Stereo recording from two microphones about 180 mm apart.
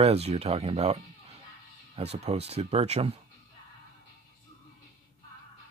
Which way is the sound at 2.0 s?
35° right (ahead or behind).